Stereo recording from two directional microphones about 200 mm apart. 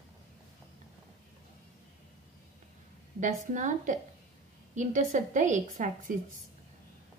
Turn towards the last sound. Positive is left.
turn(degrees=-40)  # may be behind; listen again after turning